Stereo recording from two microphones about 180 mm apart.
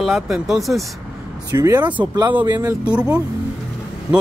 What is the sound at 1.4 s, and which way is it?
Speech, 20° right (ahead or behind).